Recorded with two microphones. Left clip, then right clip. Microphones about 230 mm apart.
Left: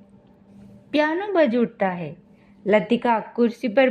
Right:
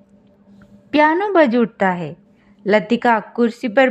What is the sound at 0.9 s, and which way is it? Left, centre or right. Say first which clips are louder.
A woman's voice: right 7 dB; centre.